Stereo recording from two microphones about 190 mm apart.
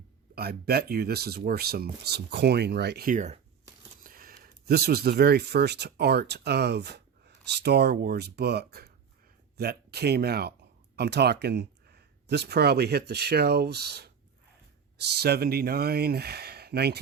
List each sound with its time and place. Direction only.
0.3 s speech: 55° right (ahead or behind); by 3.4 s 40° right (ahead or behind)
4.0 s speech: 50° right (ahead or behind)